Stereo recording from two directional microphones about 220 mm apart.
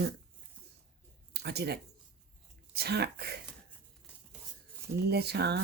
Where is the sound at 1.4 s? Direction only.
50° right (ahead or behind).